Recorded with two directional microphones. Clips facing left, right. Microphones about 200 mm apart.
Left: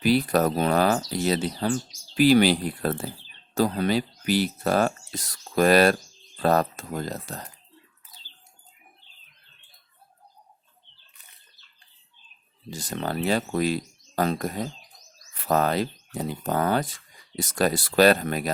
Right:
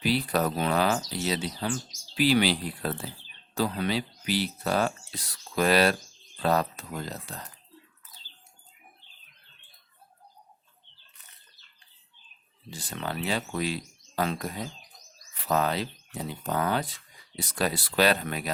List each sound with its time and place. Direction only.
0.0 s speech: 45° left (ahead or behind)
12.7 s speech: 40° left (ahead or behind)